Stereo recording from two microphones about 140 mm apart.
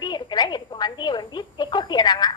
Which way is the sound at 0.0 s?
30° left (ahead or behind).